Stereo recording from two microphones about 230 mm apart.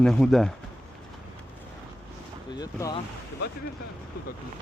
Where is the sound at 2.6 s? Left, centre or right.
Centre.